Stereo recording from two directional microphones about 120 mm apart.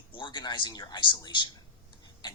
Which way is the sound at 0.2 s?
40° left (ahead or behind).